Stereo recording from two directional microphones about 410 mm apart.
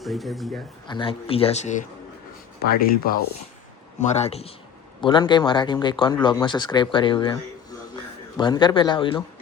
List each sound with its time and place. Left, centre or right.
0.0 s speech: centre
0.9 s speech: centre